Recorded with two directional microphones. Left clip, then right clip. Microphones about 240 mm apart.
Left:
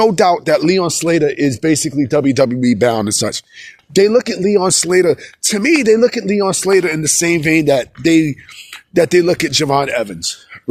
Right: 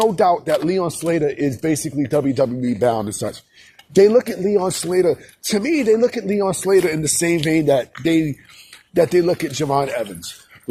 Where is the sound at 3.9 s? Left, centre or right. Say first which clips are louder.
Left 1 dB; left.